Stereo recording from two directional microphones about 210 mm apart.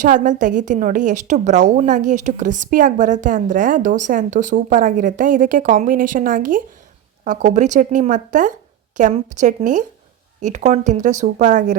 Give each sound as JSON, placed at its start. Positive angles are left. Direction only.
{"t": 0.0, "sound": "a woman's voice", "side_deg": -35}